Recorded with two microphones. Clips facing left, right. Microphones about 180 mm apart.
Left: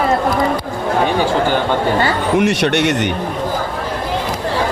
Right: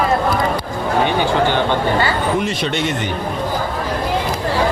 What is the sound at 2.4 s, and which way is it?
Speech, 75° left (ahead or behind).